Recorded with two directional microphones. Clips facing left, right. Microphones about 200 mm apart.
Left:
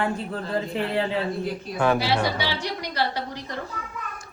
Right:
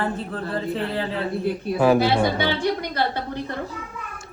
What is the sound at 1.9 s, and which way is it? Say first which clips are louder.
A woman's voice: right 4 dB; 50° right (ahead or behind).